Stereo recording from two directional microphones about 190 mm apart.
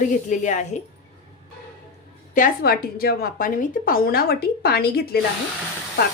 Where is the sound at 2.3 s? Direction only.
50° left (ahead or behind).